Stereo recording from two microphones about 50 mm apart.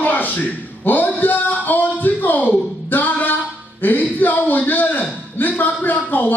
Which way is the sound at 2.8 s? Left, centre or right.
Left.